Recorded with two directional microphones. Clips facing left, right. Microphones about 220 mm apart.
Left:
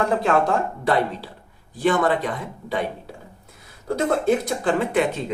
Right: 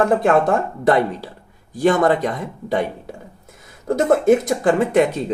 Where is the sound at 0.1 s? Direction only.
50° right (ahead or behind).